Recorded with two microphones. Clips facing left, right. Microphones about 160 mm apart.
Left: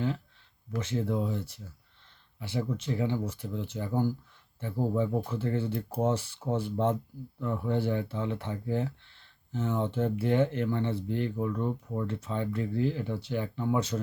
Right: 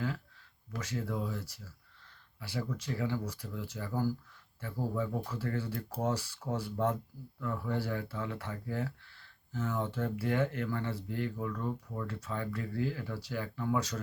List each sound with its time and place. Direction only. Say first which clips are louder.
0.8 s speech: left 6 dB; 25° left (ahead or behind)